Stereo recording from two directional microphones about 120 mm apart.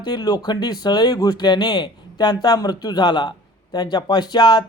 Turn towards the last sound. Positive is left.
turn(degrees=40)  # may be behind; listen again after turning